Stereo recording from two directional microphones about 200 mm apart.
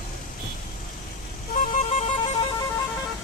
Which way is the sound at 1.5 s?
40° left (ahead or behind).